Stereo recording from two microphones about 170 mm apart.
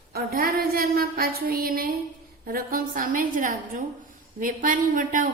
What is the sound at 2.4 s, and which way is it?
A woman's voice, 55° right (ahead or behind).